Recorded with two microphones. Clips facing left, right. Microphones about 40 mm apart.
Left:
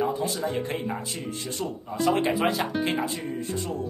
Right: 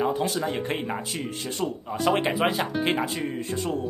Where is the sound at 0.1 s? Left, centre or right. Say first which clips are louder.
Right 1 dB; right.